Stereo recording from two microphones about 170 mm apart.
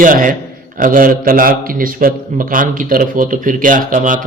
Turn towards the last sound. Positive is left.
turn(degrees=-50)  # may be behind; listen again after turning